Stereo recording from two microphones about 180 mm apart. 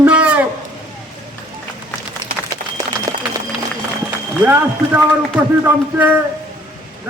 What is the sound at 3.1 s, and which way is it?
Run, 20° right (ahead or behind).